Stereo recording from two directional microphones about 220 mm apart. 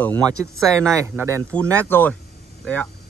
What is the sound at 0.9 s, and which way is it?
Speech, 10° right (ahead or behind).